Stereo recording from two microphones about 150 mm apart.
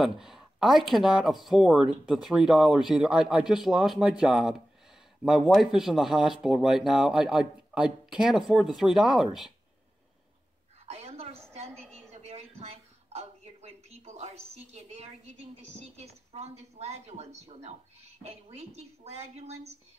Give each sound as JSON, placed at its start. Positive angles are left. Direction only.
{"t": 0.0, "sound": "speech", "side_deg": -5}
{"t": 10.9, "sound": "a sound", "side_deg": -45}
{"t": 16.0, "sound": "a woman's voice", "side_deg": -45}